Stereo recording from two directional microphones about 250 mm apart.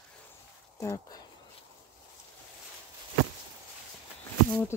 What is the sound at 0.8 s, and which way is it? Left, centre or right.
Speech, centre.